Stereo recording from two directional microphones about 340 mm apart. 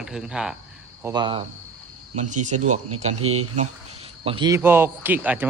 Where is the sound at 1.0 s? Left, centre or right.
Centre.